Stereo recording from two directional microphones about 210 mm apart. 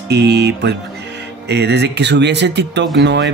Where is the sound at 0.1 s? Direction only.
50° right (ahead or behind).